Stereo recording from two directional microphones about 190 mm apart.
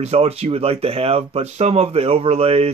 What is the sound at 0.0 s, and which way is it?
Speech, 35° right (ahead or behind).